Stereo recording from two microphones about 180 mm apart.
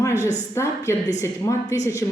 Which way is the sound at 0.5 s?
15° left (ahead or behind).